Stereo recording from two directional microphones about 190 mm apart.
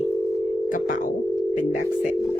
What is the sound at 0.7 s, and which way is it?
Speech, 45° left (ahead or behind).